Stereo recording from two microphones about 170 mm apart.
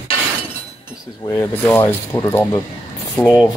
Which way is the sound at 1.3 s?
15° left (ahead or behind).